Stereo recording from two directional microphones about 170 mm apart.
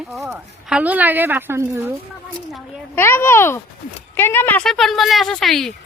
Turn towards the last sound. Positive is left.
turn(degrees=0)  # may be behind; listen again after turning